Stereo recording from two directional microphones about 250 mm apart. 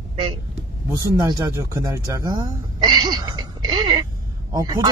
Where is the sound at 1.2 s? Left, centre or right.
Centre.